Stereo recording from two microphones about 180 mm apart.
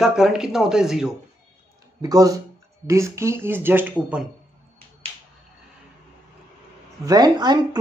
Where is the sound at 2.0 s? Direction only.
20° right (ahead or behind).